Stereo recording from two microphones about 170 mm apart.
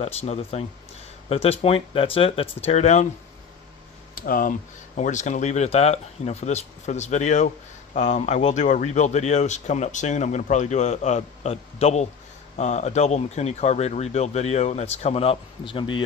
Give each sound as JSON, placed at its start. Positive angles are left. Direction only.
{"t": 0.0, "sound": "speech", "side_deg": 35}
{"t": 4.1, "sound": "speech", "side_deg": 55}